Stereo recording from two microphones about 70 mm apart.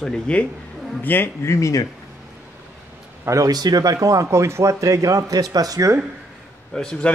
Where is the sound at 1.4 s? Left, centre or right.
Left.